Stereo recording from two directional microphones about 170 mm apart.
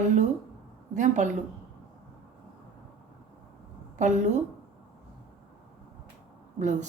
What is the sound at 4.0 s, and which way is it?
Speech, 45° right (ahead or behind).